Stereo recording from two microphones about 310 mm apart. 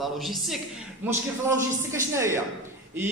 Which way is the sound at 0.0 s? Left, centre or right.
Centre.